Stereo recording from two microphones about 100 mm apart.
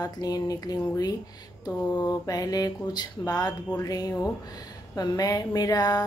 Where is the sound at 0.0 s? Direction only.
40° left (ahead or behind).